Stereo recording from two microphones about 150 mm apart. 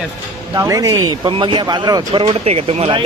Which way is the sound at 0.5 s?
20° right (ahead or behind).